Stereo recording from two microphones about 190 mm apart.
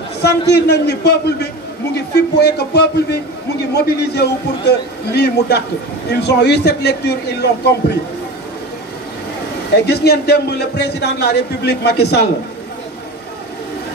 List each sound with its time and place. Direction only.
0.2 s a man's voice: 60° left (ahead or behind)
9.8 s a man's voice: 60° left (ahead or behind)